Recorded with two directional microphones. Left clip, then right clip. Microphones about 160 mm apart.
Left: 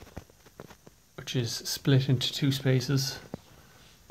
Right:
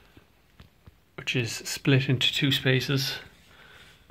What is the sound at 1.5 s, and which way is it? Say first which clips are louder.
Speech: even; 25° right (ahead or behind).